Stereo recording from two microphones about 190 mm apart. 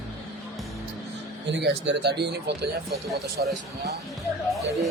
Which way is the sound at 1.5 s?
65° right (ahead or behind).